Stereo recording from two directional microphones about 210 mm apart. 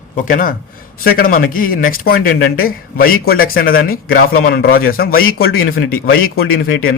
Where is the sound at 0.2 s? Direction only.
40° left (ahead or behind).